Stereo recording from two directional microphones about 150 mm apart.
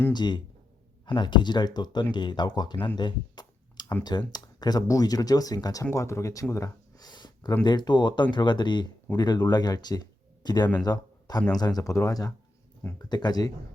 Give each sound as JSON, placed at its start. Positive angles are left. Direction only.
{"t": 0.1, "sound": "speech", "side_deg": 30}
{"t": 3.0, "sound": "a sound", "side_deg": 30}
{"t": 4.0, "sound": "speech", "side_deg": 30}